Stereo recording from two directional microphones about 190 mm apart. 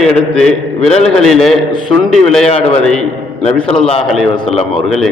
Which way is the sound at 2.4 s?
30° left (ahead or behind).